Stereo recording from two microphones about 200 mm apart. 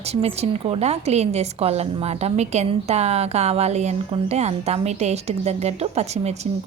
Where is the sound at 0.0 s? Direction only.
30° right (ahead or behind).